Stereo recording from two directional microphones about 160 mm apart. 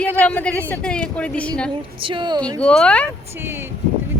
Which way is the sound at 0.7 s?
5° left (ahead or behind).